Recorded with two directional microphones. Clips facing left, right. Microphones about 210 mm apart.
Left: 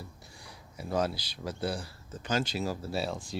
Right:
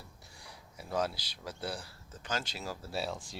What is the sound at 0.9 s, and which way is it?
Speech, 5° left (ahead or behind).